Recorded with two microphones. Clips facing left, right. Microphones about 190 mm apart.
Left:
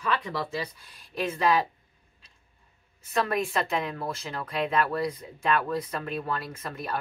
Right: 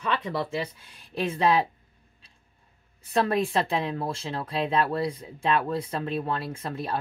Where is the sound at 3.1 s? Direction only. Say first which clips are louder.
Right 3 dB; 30° right (ahead or behind).